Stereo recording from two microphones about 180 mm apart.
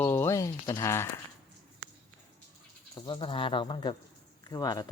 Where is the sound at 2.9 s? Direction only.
25° left (ahead or behind).